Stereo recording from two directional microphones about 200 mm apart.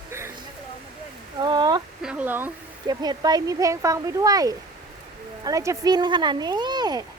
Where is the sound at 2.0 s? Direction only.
5° right (ahead or behind).